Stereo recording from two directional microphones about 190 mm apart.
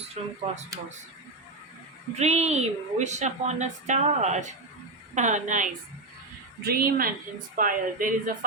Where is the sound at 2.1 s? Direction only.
35° right (ahead or behind).